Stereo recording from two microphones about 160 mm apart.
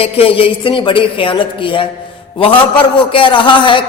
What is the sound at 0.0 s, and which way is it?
Speech, 35° left (ahead or behind).